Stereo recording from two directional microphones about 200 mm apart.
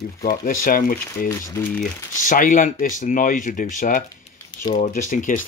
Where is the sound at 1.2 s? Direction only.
15° left (ahead or behind).